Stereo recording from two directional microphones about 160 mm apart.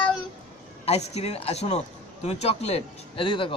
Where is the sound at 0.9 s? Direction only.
40° left (ahead or behind).